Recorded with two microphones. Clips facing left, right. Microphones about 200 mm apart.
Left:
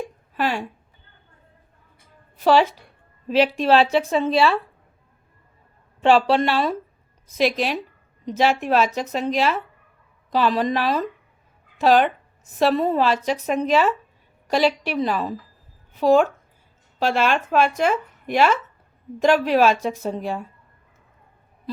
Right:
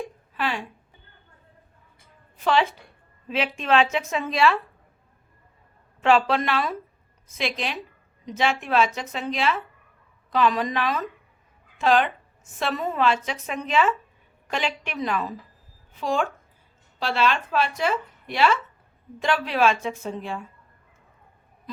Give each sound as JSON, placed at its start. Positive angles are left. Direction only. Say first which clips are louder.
{"t": 0.3, "sound": "a sound", "louder": "left 5 dB", "side_deg": 40}
{"t": 2.4, "sound": "a woman's voice", "louder": "left 5 dB", "side_deg": 40}
{"t": 6.0, "sound": "a woman's voice", "louder": "left 4 dB", "side_deg": 30}
{"t": 7.3, "sound": "a woman's voice", "louder": "left 8 dB", "side_deg": 40}